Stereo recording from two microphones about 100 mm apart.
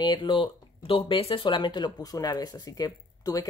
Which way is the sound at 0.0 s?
50° left (ahead or behind).